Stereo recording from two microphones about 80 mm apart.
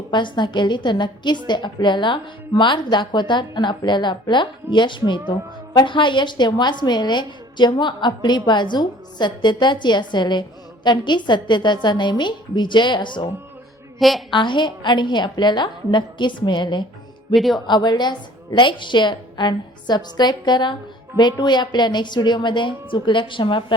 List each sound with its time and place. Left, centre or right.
0.1 s a woman's voice: left
14.3 s a woman's voice: left
17.3 s speech: centre
17.7 s a woman's voice: left